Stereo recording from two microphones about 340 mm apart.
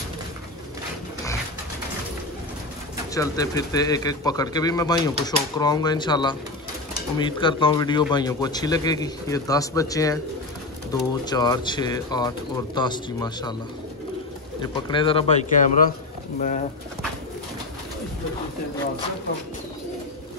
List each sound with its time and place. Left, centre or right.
3.2 s speech: centre
14.6 s speech: centre